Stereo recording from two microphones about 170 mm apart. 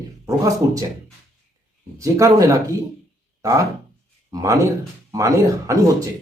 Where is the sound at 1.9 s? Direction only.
20° right (ahead or behind).